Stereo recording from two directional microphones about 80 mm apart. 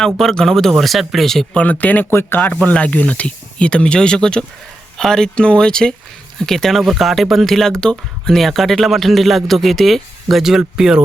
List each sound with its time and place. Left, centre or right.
0.2 s speech: centre
1.5 s speech: centre